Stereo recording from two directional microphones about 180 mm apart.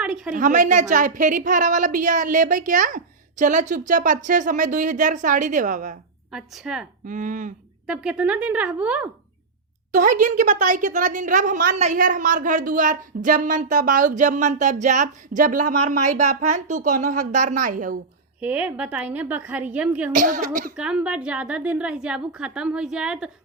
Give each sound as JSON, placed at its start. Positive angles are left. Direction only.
{"t": 0.0, "sound": "a sound", "side_deg": -5}
{"t": 0.3, "sound": "a woman's voice", "side_deg": -45}
{"t": 6.3, "sound": "a woman's voice", "side_deg": 0}
{"t": 7.0, "sound": "a woman's voice", "side_deg": -45}
{"t": 7.9, "sound": "a woman's voice", "side_deg": -5}
{"t": 9.9, "sound": "a woman's voice", "side_deg": -45}
{"t": 18.3, "sound": "a woman's voice", "side_deg": -10}
{"t": 20.1, "sound": "a woman's voice", "side_deg": -45}
{"t": 20.7, "sound": "a woman's voice", "side_deg": -5}